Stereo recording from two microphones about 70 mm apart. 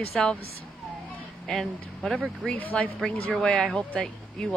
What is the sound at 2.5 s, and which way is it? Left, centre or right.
Speech, left.